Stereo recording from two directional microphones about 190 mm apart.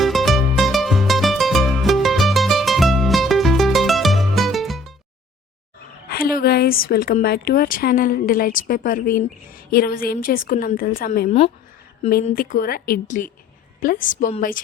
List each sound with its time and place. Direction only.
0.0 s music: centre (ahead or behind)
6.1 s a woman's voice: 55° left (ahead or behind)
11.3 s speech: 30° left (ahead or behind)
12.0 s a woman's voice: 45° left (ahead or behind)